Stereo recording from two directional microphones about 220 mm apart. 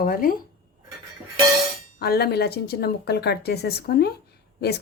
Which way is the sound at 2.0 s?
45° left (ahead or behind).